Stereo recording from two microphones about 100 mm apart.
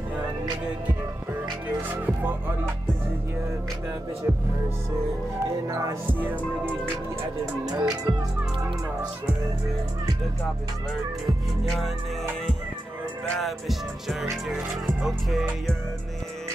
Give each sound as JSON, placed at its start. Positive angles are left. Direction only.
{"t": 1.8, "sound": "music", "side_deg": -20}
{"t": 5.7, "sound": "speech", "side_deg": -35}
{"t": 6.1, "sound": "music", "side_deg": -20}
{"t": 7.6, "sound": "speech", "side_deg": -40}
{"t": 13.4, "sound": "music", "side_deg": 0}